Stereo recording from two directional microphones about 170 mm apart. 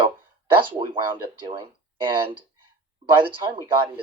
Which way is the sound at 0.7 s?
30° right (ahead or behind).